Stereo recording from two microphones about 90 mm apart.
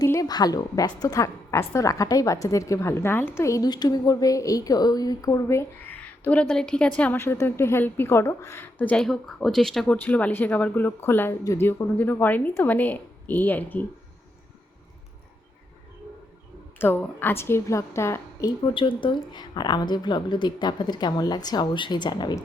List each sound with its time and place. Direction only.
0.0 s a woman's voice: 40° left (ahead or behind)
3.7 s a woman's voice: 50° left (ahead or behind); by 9.0 s 20° left (ahead or behind)
9.0 s speech: 5° left (ahead or behind)
9.8 s a woman's voice: 15° left (ahead or behind)
16.7 s a woman's voice: 25° left (ahead or behind)
18.7 s a woman's voice: 75° left (ahead or behind); by 22.4 s 55° left (ahead or behind)